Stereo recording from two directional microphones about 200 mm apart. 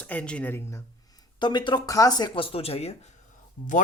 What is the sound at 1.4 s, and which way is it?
Speech, 20° left (ahead or behind).